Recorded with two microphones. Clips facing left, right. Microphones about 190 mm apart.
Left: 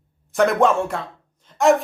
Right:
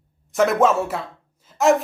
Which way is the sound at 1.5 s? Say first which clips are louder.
Left 1 dB; 5° right (ahead or behind).